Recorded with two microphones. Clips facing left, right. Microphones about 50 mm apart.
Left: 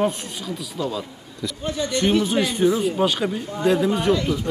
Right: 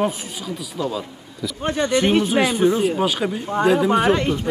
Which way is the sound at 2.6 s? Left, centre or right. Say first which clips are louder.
Even; right.